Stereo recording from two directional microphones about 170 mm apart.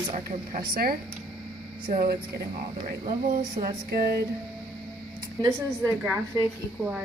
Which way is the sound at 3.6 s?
60° right (ahead or behind).